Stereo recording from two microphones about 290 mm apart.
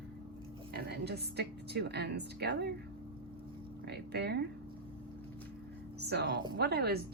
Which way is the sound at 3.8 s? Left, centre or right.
Right.